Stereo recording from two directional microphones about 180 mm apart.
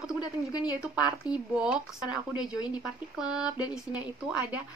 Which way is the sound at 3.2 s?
5° right (ahead or behind).